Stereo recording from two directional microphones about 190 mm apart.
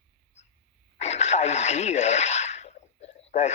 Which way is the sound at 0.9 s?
35° left (ahead or behind).